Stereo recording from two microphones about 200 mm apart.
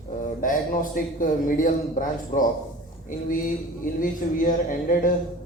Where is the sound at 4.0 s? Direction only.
40° left (ahead or behind).